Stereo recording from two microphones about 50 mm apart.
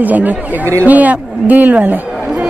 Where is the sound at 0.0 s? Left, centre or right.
Right.